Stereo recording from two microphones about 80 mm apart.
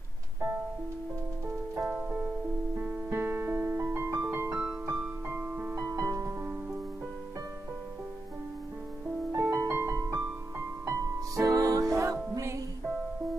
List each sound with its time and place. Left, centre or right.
1.9 s music: centre
4.6 s piano: centre
5.3 s music: right
5.8 s music: right
9.3 s music: right
10.9 s music: right